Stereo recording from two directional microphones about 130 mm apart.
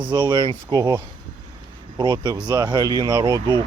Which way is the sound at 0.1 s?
35° right (ahead or behind).